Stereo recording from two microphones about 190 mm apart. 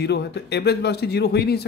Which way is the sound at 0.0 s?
60° left (ahead or behind).